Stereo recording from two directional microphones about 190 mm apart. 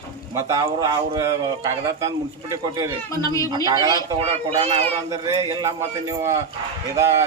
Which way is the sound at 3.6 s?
20° right (ahead or behind).